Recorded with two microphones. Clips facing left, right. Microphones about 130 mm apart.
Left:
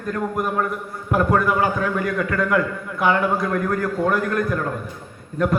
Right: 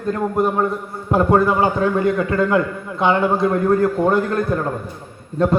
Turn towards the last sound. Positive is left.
turn(degrees=-30)  # may be behind; listen again after turning